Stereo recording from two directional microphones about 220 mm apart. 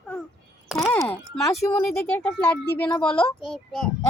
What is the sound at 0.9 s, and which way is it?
A child's voice, 10° left (ahead or behind).